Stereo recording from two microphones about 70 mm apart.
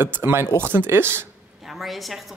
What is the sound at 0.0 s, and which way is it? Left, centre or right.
Speech, right.